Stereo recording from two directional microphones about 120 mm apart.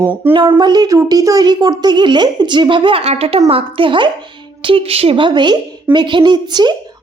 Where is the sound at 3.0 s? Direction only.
60° right (ahead or behind); by 6.7 s 35° right (ahead or behind).